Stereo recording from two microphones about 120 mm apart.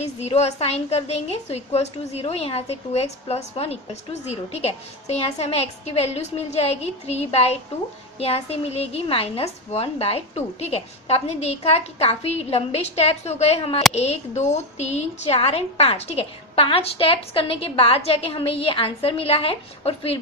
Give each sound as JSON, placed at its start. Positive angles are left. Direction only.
{"t": 0.0, "sound": "a woman's voice", "side_deg": 60}